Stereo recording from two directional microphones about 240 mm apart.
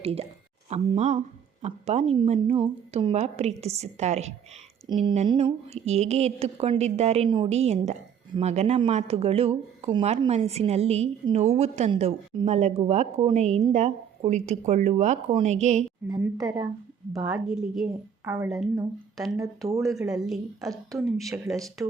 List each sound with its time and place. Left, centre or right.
0.0 s speech: right
16.0 s a woman's voice: centre
17.1 s a woman's voice: centre
20.1 s a woman's voice: centre
21.2 s a woman's voice: centre